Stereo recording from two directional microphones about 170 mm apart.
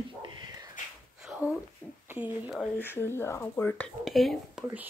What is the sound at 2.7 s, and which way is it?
Speech, 15° left (ahead or behind).